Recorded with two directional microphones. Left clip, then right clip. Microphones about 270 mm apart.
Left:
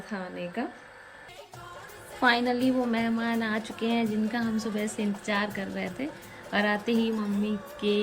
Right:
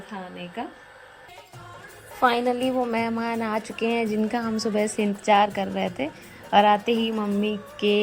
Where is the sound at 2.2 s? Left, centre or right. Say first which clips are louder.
Right 3 dB; right.